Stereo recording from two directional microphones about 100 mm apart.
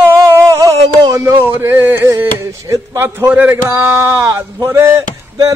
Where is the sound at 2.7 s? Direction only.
25° right (ahead or behind).